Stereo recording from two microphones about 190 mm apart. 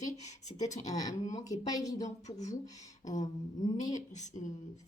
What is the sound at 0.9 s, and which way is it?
Speech, 20° left (ahead or behind).